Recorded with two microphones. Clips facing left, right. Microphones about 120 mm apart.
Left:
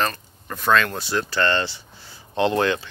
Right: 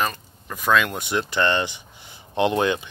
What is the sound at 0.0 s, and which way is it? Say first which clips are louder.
Speech: left 1 dB; 10° right (ahead or behind).